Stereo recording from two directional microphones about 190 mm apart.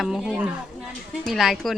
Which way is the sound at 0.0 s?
Centre (ahead or behind).